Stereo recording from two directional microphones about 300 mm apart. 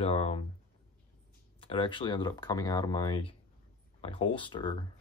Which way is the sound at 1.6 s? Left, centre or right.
Centre.